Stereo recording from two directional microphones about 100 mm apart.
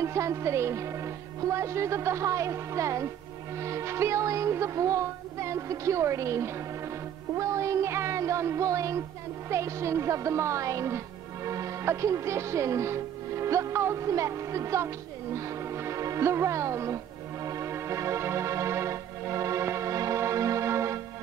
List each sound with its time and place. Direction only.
0.0 s speech: 30° right (ahead or behind)
7.3 s music: 30° right (ahead or behind)
9.5 s speech: 30° right (ahead or behind)
17.5 s music: 30° right (ahead or behind)